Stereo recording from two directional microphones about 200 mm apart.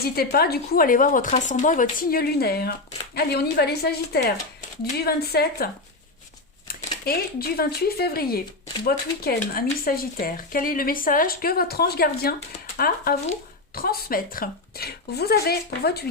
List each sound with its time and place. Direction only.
0.0 s speech: 50° left (ahead or behind)
6.7 s speech: 50° left (ahead or behind)